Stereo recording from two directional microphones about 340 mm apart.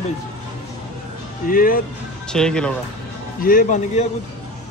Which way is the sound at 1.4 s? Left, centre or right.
Left.